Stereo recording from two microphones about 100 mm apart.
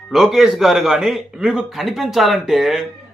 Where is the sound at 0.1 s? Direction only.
5° right (ahead or behind).